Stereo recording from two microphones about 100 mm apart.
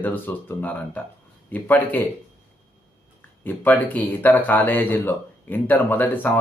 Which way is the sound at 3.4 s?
15° left (ahead or behind).